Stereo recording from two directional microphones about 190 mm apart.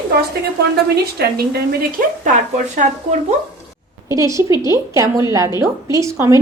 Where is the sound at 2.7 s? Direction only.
40° right (ahead or behind).